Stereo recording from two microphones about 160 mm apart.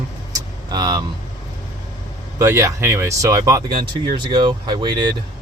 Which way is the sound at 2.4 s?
20° right (ahead or behind).